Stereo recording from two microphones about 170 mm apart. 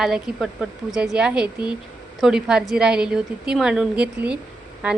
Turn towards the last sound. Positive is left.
turn(degrees=-5)  # may be behind; listen again after turning